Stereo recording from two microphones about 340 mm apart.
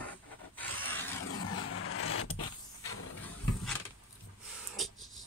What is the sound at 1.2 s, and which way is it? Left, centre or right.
Vehicle, left.